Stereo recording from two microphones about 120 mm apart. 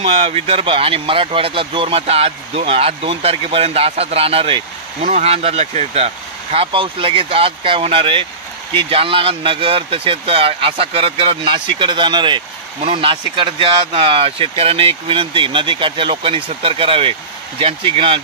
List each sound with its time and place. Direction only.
0.0 s speech: 55° right (ahead or behind)
5.0 s speech: 70° right (ahead or behind); by 18.2 s 50° right (ahead or behind)